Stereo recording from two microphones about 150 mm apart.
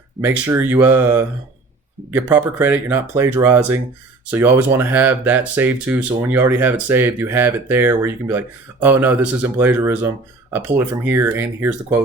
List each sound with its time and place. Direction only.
0.2 s speech: 15° right (ahead or behind)